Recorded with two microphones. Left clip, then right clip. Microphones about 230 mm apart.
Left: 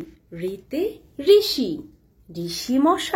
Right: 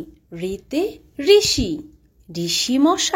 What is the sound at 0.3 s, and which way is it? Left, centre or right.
A woman's voice, right.